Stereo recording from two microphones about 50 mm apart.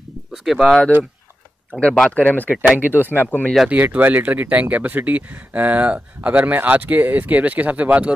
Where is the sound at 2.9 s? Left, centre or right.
Left.